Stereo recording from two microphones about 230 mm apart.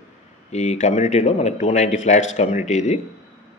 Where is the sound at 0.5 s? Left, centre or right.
Left.